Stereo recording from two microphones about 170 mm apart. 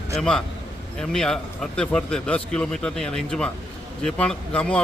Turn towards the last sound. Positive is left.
turn(degrees=5)  # may be behind; listen again after turning